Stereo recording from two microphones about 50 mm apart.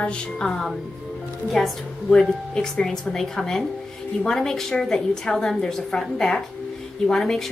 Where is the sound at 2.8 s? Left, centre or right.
Centre.